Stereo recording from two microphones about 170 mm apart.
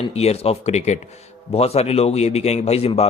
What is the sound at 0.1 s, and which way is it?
A man's voice, 40° left (ahead or behind).